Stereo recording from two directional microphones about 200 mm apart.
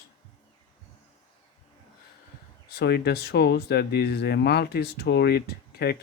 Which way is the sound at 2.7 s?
55° left (ahead or behind).